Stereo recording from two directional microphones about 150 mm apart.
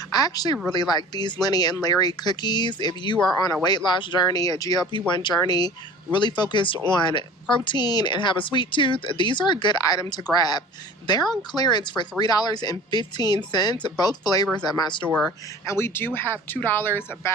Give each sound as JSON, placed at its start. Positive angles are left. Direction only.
{"t": 0.1, "sound": "a woman's voice", "side_deg": 25}
{"t": 15.6, "sound": "speech", "side_deg": 15}